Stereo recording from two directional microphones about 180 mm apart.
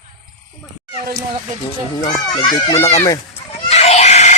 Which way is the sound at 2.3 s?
25° left (ahead or behind).